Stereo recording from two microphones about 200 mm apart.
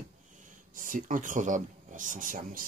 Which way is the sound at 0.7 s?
40° right (ahead or behind).